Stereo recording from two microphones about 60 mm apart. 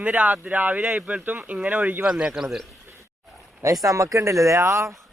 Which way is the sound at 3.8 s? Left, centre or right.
Right.